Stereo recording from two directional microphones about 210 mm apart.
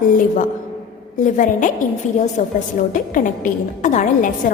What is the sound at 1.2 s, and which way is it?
A woman's voice, 35° left (ahead or behind).